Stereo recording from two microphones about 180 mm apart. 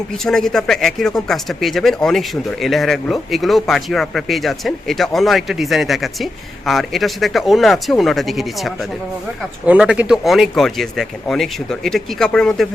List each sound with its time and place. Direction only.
0.3 s speech: centre (ahead or behind)